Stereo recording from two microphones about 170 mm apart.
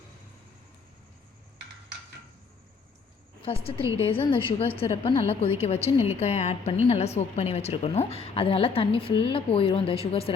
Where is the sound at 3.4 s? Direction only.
35° left (ahead or behind).